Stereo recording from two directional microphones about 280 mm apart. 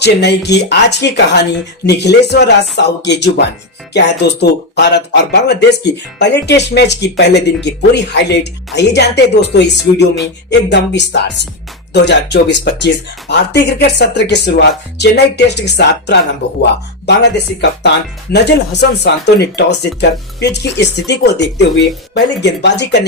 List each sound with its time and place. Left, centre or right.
0.0 s speech: left